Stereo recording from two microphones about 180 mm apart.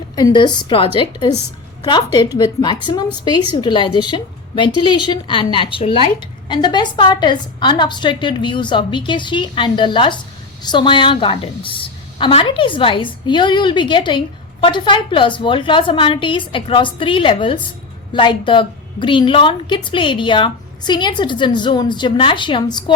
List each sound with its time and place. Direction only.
0.2 s a woman's voice: 20° left (ahead or behind)